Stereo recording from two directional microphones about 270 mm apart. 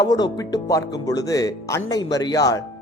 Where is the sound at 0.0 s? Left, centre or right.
Centre.